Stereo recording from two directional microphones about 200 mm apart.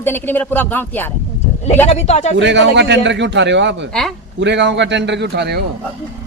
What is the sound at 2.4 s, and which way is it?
A man's voice, 60° right (ahead or behind).